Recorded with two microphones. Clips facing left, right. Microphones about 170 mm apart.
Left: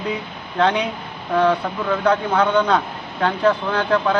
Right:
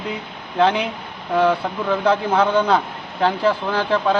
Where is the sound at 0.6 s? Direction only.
25° right (ahead or behind).